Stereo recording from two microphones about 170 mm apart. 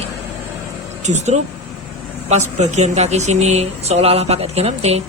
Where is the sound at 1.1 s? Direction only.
45° right (ahead or behind).